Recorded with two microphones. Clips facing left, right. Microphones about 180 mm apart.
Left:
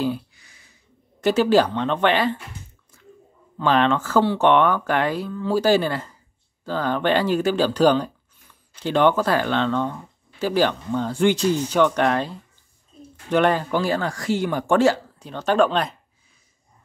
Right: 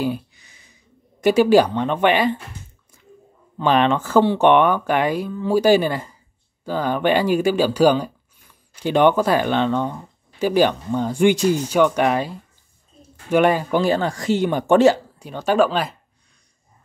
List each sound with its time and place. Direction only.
0.0 s a sound: 20° right (ahead or behind)
1.2 s speech: 15° right (ahead or behind)
3.5 s speech: 15° right (ahead or behind)